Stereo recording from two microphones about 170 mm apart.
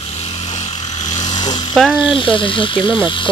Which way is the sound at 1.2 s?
25° left (ahead or behind).